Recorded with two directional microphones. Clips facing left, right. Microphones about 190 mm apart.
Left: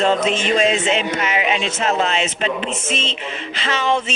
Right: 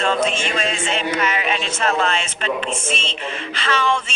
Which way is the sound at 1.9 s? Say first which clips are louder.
Left 3 dB; 20° left (ahead or behind).